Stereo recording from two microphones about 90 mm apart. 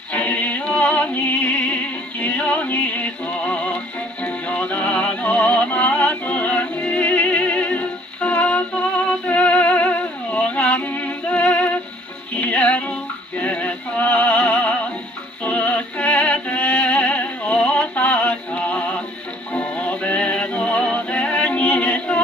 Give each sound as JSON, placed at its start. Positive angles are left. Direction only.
{"t": 0.1, "sound": "music", "side_deg": 20}
{"t": 9.3, "sound": "humming", "side_deg": 15}
{"t": 12.4, "sound": "music", "side_deg": 15}